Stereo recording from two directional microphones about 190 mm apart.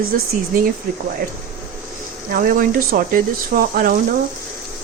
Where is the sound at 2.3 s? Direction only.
50° right (ahead or behind).